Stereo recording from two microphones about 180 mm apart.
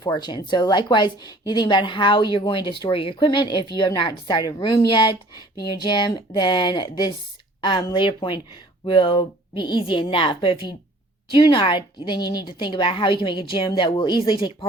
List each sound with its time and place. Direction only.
0.0 s speech: 25° left (ahead or behind)